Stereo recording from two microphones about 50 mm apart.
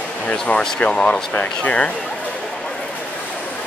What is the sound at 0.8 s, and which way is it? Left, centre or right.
Speech, left.